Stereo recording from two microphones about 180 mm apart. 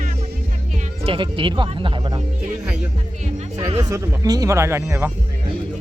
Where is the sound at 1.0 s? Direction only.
30° right (ahead or behind).